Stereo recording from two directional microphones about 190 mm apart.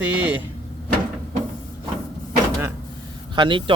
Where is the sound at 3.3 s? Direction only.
25° right (ahead or behind).